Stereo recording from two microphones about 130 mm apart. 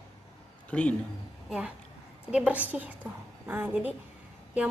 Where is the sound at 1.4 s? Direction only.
5° right (ahead or behind).